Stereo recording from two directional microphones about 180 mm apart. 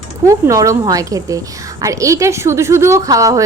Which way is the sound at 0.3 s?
20° right (ahead or behind).